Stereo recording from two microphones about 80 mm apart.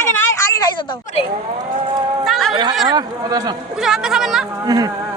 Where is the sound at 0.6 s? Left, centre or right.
Left.